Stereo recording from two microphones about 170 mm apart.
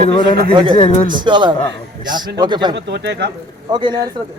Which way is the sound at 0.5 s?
25° right (ahead or behind).